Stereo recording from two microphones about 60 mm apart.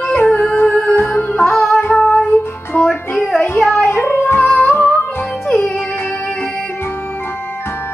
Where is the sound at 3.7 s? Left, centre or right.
Left.